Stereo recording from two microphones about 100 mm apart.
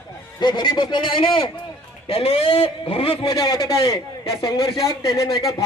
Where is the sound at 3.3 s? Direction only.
40° left (ahead or behind).